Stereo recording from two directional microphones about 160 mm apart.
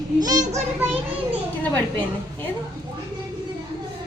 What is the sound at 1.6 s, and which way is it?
Speech, 10° left (ahead or behind).